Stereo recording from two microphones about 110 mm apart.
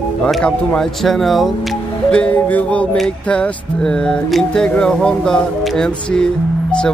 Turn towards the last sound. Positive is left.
turn(degrees=10)  # may be behind; listen again after turning